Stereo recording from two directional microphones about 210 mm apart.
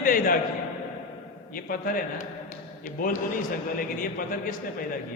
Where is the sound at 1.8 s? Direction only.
40° left (ahead or behind).